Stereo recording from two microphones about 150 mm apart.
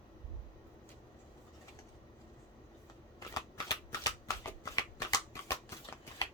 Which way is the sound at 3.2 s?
25° left (ahead or behind).